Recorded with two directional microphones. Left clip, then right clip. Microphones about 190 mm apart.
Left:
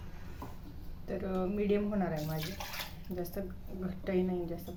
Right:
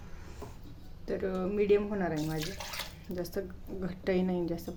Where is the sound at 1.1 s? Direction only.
50° right (ahead or behind).